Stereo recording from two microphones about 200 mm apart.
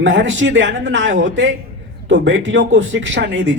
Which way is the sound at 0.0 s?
65° right (ahead or behind).